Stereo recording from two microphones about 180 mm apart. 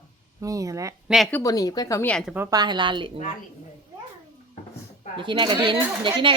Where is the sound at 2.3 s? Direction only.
15° right (ahead or behind).